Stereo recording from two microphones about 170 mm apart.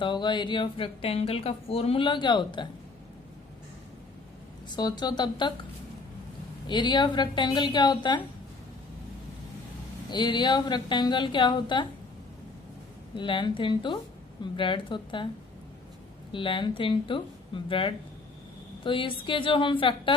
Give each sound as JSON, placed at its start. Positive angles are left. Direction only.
{"t": 0.0, "sound": "speech", "side_deg": 30}
{"t": 4.7, "sound": "speech", "side_deg": 25}
{"t": 6.7, "sound": "speech", "side_deg": 25}
{"t": 10.1, "sound": "speech", "side_deg": 25}
{"t": 13.1, "sound": "speech", "side_deg": 30}
{"t": 16.3, "sound": "a woman's voice", "side_deg": 30}